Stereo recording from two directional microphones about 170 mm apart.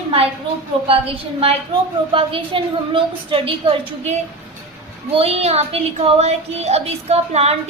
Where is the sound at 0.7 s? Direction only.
30° right (ahead or behind).